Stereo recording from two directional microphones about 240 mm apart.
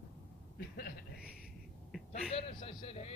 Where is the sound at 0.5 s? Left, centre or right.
Left.